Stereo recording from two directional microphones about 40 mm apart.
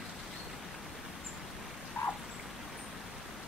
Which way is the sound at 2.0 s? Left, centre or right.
Left.